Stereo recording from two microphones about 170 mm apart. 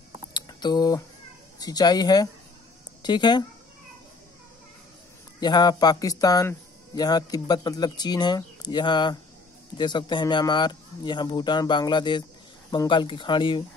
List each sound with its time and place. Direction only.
0.3 s a sound: 25° left (ahead or behind)
1.6 s speech: 25° left (ahead or behind)
5.4 s speech: 25° left (ahead or behind)